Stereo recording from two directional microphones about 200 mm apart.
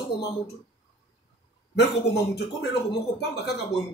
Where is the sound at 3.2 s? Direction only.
55° left (ahead or behind).